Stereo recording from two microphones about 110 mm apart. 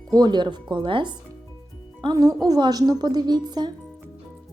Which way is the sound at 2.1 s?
35° right (ahead or behind).